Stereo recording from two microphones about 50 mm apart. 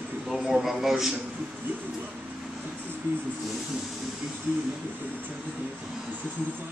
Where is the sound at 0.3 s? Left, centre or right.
Centre.